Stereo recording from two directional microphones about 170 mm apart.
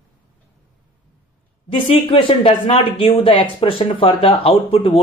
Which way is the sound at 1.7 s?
30° left (ahead or behind).